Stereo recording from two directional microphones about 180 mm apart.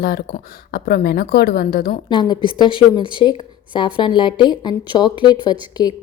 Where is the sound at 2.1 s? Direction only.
25° left (ahead or behind).